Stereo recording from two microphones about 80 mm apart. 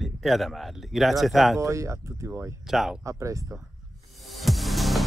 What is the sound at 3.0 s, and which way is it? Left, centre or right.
Speech, right.